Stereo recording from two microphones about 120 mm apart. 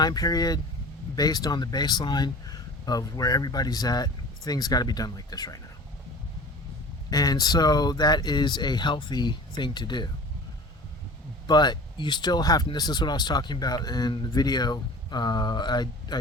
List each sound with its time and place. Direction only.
0.0 s speech: 35° left (ahead or behind)
7.1 s speech: 30° left (ahead or behind)
11.4 s speech: 35° left (ahead or behind)